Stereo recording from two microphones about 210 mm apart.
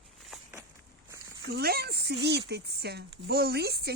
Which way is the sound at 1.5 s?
50° right (ahead or behind).